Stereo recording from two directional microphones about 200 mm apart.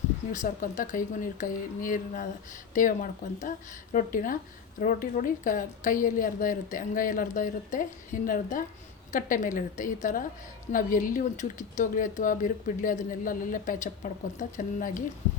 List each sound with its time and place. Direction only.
0.4 s speech: 40° left (ahead or behind)